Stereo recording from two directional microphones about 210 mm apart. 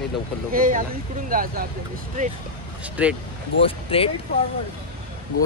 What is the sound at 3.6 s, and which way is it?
Speech, 25° left (ahead or behind).